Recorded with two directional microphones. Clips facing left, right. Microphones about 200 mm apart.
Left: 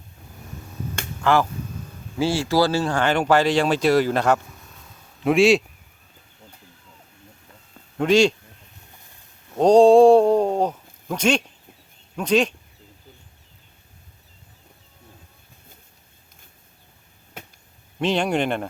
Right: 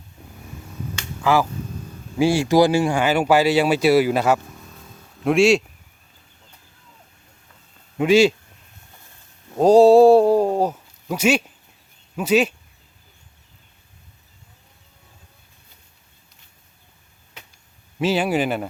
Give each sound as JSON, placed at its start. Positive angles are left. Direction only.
{"t": 1.2, "sound": "speech", "side_deg": -5}
{"t": 2.1, "sound": "speech", "side_deg": -15}
{"t": 7.9, "sound": "speech", "side_deg": -5}
{"t": 9.6, "sound": "speech", "side_deg": -5}
{"t": 17.4, "sound": "a sound", "side_deg": 50}
{"t": 18.0, "sound": "speech", "side_deg": -5}